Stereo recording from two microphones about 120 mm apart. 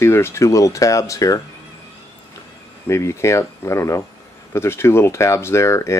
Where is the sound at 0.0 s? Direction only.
20° left (ahead or behind).